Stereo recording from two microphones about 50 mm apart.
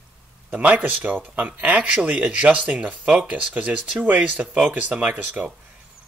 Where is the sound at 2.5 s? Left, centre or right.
Right.